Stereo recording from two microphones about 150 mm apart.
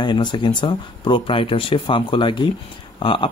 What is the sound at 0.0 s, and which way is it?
Speech, 30° left (ahead or behind).